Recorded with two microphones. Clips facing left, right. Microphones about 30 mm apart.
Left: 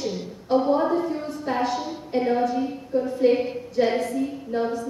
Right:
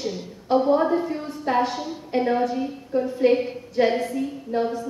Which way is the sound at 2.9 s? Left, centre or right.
Right.